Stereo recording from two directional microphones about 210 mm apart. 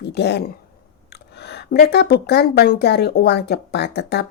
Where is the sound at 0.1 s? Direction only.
50° left (ahead or behind).